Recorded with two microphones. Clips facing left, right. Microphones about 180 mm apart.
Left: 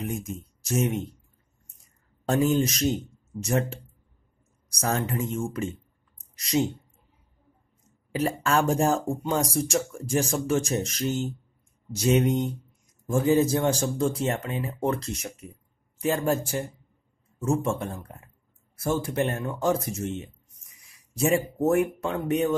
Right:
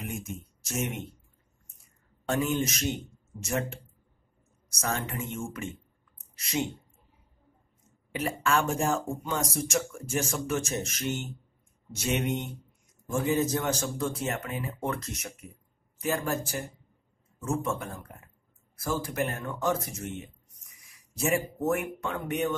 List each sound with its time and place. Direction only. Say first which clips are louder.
0.0 s speech: left 5 dB; 35° left (ahead or behind)
2.2 s speech: left 5 dB; 35° left (ahead or behind)
6.1 s a sound: left 6 dB; 35° left (ahead or behind)
8.1 s speech: left 3 dB; 35° left (ahead or behind)
17.6 s speech: left 4 dB; 30° left (ahead or behind)
21.5 s speech: left 6 dB; 30° left (ahead or behind)